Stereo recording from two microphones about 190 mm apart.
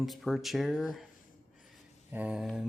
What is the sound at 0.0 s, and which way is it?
Speech, centre (ahead or behind).